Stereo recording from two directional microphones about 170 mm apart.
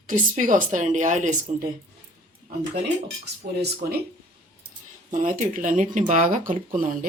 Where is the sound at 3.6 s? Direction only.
65° right (ahead or behind).